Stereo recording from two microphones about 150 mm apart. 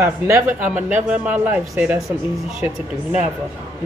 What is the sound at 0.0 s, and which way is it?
Speech, 10° right (ahead or behind).